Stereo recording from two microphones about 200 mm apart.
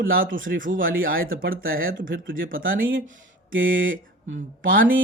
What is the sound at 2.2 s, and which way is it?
Speech, 75° right (ahead or behind).